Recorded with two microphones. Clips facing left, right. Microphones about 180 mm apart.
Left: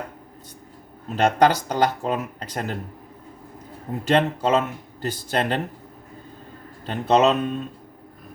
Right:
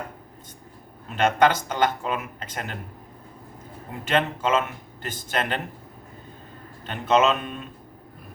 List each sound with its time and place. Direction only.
1.1 s speech: 35° left (ahead or behind)
4.0 s speech: 35° left (ahead or behind)
6.8 s speech: 35° left (ahead or behind)